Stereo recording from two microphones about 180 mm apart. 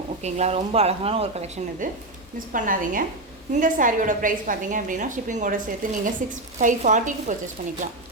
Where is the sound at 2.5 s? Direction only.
50° right (ahead or behind).